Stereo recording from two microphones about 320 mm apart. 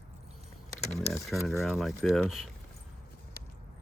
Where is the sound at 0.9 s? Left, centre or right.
Centre.